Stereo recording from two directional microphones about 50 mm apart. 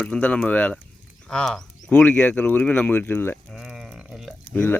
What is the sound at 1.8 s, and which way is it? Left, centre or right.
Speech, left.